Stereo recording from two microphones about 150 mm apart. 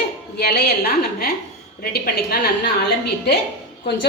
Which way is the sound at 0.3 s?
90° left.